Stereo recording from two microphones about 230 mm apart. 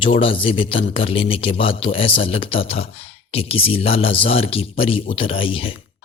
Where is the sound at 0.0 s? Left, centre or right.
Left.